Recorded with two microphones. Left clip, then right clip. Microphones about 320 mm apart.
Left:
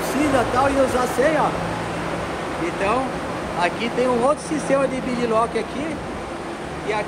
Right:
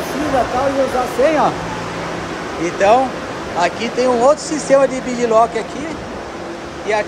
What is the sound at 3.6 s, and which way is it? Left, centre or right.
Speech, centre.